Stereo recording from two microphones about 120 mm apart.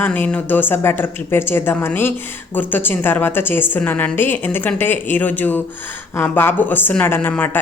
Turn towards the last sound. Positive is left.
turn(degrees=15)  # may be behind; listen again after turning